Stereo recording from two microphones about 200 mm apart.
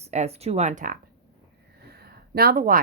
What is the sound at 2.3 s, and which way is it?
Speech, 50° right (ahead or behind).